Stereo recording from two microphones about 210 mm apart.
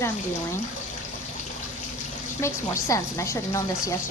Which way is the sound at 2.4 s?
15° left (ahead or behind).